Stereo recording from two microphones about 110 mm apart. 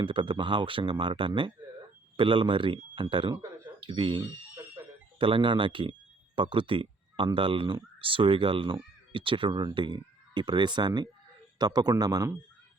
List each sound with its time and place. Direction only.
0.0 s speech: 50° right (ahead or behind)